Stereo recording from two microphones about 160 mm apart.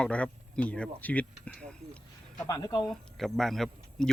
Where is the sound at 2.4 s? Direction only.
20° left (ahead or behind).